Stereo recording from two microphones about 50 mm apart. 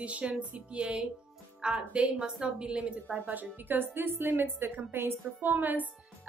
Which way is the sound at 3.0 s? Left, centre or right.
Right.